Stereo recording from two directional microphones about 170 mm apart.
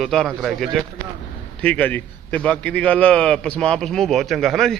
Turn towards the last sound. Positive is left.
turn(degrees=0)  # may be behind; listen again after turning